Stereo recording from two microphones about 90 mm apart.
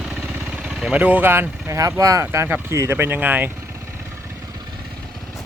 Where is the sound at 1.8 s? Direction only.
35° right (ahead or behind); by 3.5 s 20° right (ahead or behind).